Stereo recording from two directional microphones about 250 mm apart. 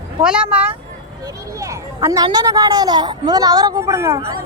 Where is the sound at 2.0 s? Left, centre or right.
Centre.